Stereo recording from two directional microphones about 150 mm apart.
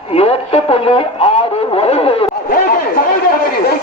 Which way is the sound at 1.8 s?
40° left (ahead or behind).